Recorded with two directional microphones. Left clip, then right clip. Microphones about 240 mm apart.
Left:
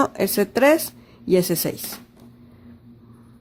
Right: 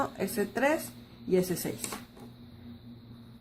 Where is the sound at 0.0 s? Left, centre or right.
Left.